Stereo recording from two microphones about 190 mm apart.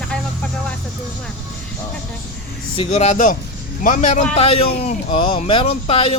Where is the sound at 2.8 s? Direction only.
35° left (ahead or behind).